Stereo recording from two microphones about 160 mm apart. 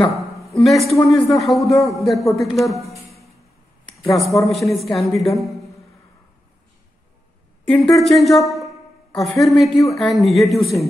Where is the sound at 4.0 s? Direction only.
Centre (ahead or behind).